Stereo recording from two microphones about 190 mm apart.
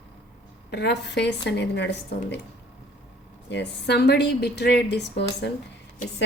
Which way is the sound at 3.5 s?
65° left (ahead or behind).